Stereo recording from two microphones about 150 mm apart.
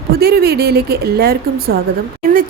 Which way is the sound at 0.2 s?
90° right.